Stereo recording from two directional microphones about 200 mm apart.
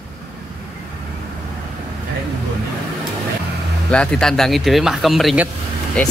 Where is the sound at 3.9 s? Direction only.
5° left (ahead or behind).